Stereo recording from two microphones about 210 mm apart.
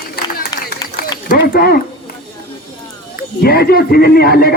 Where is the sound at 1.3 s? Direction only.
45° left (ahead or behind).